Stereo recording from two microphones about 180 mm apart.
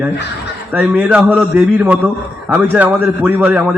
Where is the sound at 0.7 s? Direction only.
5° right (ahead or behind).